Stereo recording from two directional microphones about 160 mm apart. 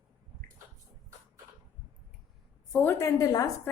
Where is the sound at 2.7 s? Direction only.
10° left (ahead or behind).